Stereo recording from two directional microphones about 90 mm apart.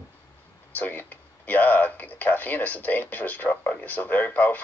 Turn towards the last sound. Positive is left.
turn(degrees=20)  # may be behind; listen again after turning